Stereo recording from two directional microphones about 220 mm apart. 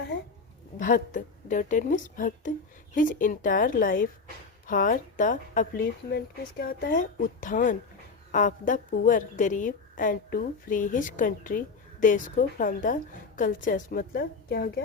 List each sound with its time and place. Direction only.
0.8 s a woman's voice: 40° left (ahead or behind)